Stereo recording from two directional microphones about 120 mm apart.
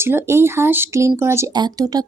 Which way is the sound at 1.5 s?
35° right (ahead or behind).